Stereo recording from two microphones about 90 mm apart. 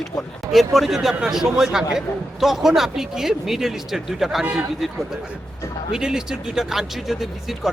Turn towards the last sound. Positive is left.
turn(degrees=-5)  # may be behind; listen again after turning